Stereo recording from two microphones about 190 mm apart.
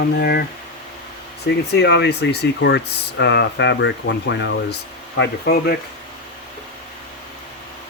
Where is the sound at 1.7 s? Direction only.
60° left (ahead or behind).